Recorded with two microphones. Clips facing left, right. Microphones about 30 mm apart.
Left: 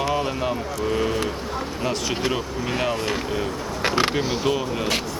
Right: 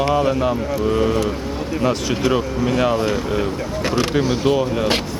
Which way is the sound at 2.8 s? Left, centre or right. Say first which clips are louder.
Right 6 dB; centre.